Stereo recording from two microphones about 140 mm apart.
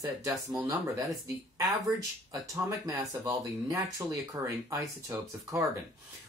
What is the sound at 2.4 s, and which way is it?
Speech, 25° right (ahead or behind).